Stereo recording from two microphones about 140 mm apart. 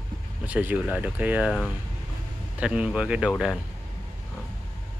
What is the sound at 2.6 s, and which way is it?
Speech, 5° right (ahead or behind).